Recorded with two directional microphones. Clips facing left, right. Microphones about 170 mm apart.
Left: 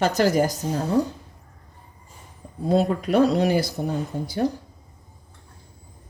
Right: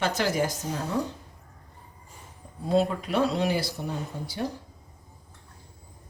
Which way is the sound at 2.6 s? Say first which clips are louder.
Left 4 dB; 45° left (ahead or behind).